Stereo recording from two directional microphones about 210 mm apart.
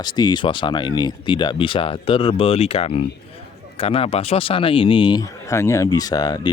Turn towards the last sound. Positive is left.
turn(degrees=20)  # may be behind; listen again after turning